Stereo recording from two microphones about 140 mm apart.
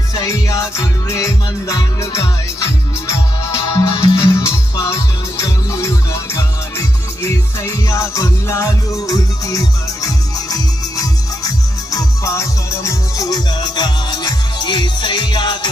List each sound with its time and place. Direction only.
0.2 s music: 25° left (ahead or behind)